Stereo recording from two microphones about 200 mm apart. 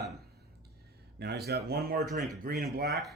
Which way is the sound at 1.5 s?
55° right (ahead or behind).